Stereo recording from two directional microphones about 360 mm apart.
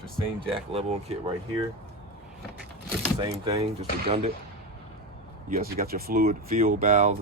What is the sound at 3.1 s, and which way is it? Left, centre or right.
Speech, centre.